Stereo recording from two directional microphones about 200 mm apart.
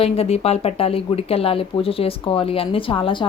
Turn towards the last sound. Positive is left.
turn(degrees=25)  # may be behind; listen again after turning